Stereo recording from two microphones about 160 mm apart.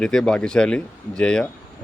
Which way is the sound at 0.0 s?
5° left (ahead or behind).